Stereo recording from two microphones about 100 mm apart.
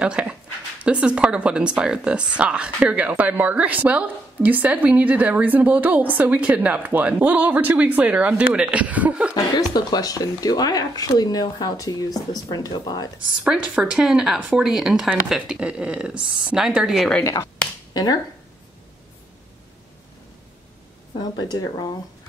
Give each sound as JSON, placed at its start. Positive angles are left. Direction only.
{"t": 0.0, "sound": "a woman's voice", "side_deg": -10}
{"t": 9.3, "sound": "speech", "side_deg": 40}
{"t": 13.4, "sound": "a woman's voice", "side_deg": -10}
{"t": 17.2, "sound": "speech", "side_deg": 35}
{"t": 21.2, "sound": "speech", "side_deg": 40}